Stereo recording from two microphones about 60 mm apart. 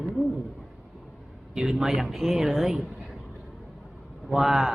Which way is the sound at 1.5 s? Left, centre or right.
Centre.